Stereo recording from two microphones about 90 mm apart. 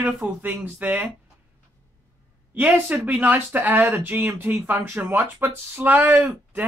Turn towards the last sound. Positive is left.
turn(degrees=-25)  # may be behind; listen again after turning